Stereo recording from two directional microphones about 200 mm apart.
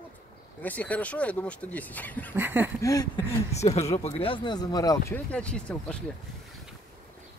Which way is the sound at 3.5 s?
35° left (ahead or behind).